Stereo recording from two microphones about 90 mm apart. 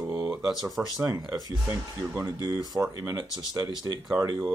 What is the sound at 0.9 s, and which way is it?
Speech, 40° right (ahead or behind).